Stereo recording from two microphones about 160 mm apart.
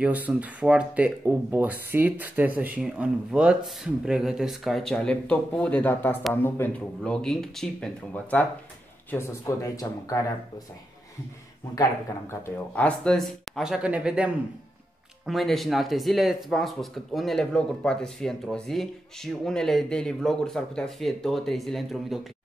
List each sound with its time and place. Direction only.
0.0 s speech: 10° right (ahead or behind); by 10.2 s 20° left (ahead or behind)
11.7 s speech: 20° left (ahead or behind); by 22.2 s centre (ahead or behind)